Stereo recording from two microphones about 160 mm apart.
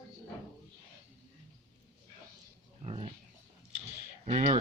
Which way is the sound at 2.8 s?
35° right (ahead or behind).